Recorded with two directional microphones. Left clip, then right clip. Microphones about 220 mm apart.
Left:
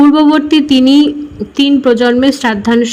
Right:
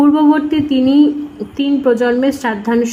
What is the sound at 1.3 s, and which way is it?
A woman's voice, 30° left (ahead or behind).